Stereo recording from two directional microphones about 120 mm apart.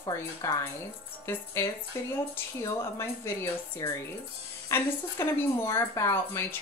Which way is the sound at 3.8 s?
30° left (ahead or behind).